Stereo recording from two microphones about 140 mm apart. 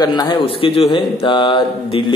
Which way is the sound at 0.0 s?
30° left (ahead or behind).